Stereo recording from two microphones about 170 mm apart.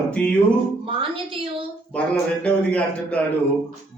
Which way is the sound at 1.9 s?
5° left (ahead or behind).